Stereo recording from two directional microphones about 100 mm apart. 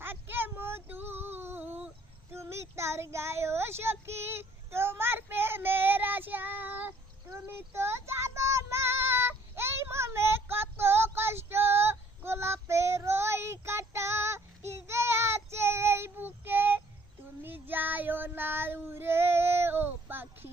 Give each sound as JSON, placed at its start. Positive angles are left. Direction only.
{"t": 0.0, "sound": "female singing", "side_deg": -20}
{"t": 2.3, "sound": "child singing", "side_deg": -25}